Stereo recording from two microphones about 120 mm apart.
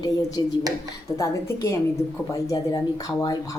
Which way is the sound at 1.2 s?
25° left (ahead or behind).